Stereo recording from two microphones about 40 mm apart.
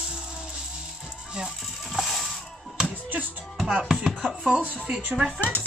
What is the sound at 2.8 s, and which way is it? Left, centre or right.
Music, right.